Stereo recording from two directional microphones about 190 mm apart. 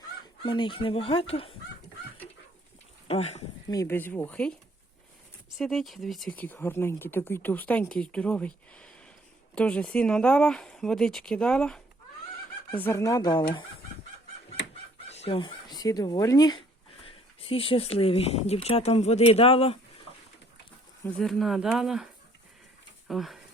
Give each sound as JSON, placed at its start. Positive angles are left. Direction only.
{"t": 0.4, "sound": "speech", "side_deg": 25}
{"t": 3.1, "sound": "speech", "side_deg": 35}
{"t": 3.7, "sound": "speech", "side_deg": 15}
{"t": 5.5, "sound": "speech", "side_deg": 0}
{"t": 14.6, "sound": "chicken", "side_deg": 70}
{"t": 15.1, "sound": "speech", "side_deg": 30}
{"t": 21.2, "sound": "speech", "side_deg": 0}